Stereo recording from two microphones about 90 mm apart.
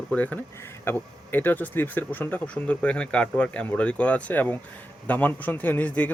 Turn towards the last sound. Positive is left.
turn(degrees=20)  # may be behind; listen again after turning